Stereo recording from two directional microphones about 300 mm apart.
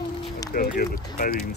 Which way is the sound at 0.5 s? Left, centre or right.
Left.